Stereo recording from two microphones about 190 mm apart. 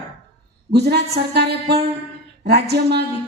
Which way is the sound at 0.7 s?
60° right (ahead or behind).